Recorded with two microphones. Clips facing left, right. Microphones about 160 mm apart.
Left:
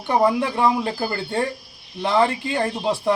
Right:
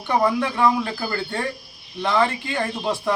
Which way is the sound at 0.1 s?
20° left (ahead or behind).